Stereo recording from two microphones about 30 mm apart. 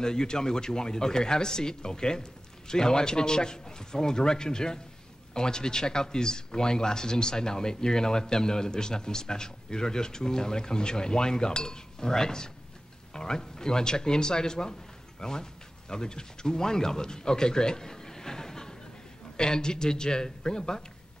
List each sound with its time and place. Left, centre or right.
0.0 s speech: left